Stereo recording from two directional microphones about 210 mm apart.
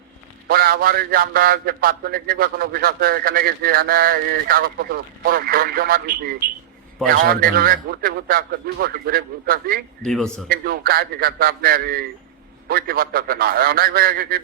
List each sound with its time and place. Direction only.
0.4 s speech: 45° right (ahead or behind)
10.0 s a man's voice: 5° left (ahead or behind)
10.5 s speech: 45° right (ahead or behind)